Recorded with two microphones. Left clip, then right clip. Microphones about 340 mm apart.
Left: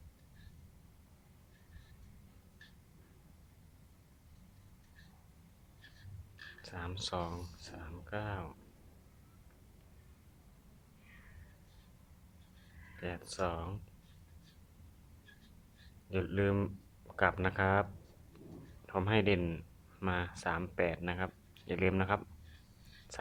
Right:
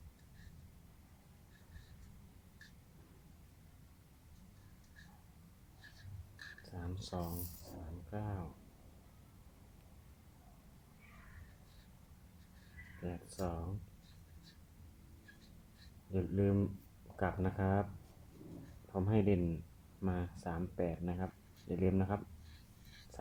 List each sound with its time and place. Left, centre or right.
6.6 s a sound: left
7.1 s speech: left
13.0 s a sound: left
16.1 s speech: left
17.2 s speech: left
18.9 s speech: left